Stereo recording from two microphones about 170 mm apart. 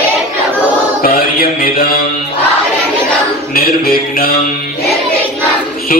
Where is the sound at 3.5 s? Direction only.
60° left (ahead or behind).